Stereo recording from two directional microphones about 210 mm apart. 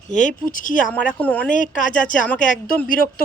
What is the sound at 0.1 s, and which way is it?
Speech, 35° left (ahead or behind).